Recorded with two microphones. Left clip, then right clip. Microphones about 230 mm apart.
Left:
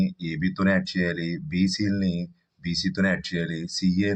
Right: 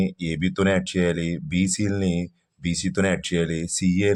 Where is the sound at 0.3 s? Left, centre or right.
Right.